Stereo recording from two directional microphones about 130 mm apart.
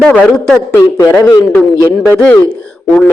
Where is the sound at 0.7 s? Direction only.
20° left (ahead or behind).